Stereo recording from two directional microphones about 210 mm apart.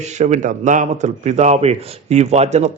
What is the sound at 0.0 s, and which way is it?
A man's voice, 35° right (ahead or behind).